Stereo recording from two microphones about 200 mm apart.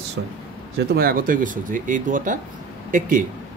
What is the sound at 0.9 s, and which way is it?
Speech, 45° right (ahead or behind).